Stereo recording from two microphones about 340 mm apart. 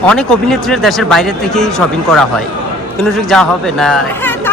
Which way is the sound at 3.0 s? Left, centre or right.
Centre.